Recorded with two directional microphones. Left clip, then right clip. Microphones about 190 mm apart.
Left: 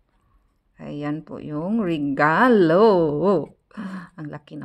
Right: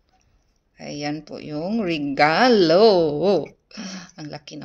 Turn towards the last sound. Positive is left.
turn(degrees=50)  # may be behind; listen again after turning